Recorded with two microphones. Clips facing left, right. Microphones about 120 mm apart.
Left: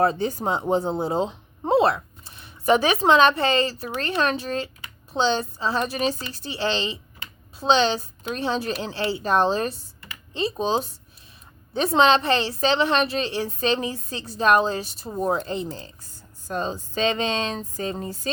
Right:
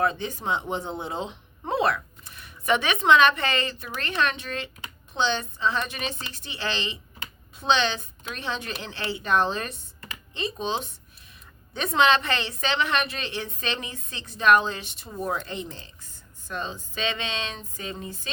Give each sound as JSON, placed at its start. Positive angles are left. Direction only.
{"t": 0.0, "sound": "speech", "side_deg": 35}